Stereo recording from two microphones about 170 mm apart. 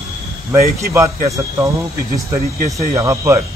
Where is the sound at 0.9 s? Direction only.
15° right (ahead or behind).